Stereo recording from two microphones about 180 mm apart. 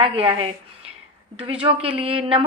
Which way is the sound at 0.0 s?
30° right (ahead or behind).